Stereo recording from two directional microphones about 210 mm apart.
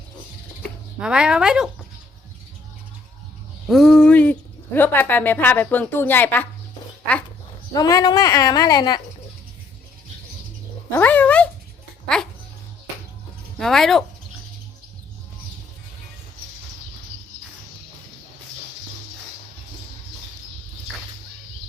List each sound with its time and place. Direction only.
0.9 s speech: 5° right (ahead or behind)
3.7 s a woman's voice: centre (ahead or behind)
7.7 s a woman's voice: 15° left (ahead or behind)
10.9 s a woman's voice: 10° left (ahead or behind)
13.6 s speech: centre (ahead or behind)